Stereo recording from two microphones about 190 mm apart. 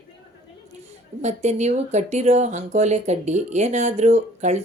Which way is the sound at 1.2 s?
40° right (ahead or behind).